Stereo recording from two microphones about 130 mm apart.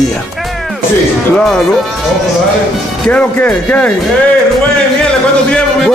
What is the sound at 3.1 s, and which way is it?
Speech, 10° left (ahead or behind).